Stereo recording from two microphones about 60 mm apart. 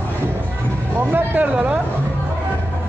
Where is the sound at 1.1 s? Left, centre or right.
Right.